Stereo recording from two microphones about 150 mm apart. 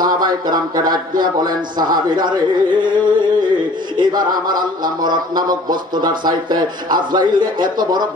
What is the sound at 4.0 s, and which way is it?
A man's voice, 25° right (ahead or behind).